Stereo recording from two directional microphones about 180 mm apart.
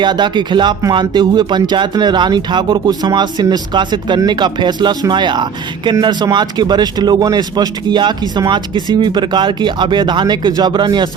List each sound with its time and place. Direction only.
0.0 s speech: 25° right (ahead or behind)